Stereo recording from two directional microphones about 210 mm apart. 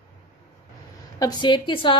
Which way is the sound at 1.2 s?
20° left (ahead or behind).